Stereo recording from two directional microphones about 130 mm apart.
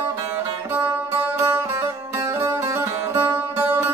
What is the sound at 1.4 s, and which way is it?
Music, 20° right (ahead or behind).